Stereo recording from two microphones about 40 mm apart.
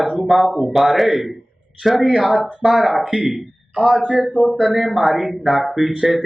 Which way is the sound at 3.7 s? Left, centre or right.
Right.